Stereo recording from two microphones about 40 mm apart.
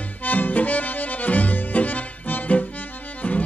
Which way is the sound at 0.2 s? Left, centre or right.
Left.